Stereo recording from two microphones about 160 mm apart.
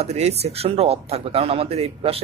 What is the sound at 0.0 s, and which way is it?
Speech, 40° right (ahead or behind).